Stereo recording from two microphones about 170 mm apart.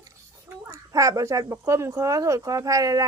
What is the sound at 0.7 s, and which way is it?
Speech, 20° right (ahead or behind).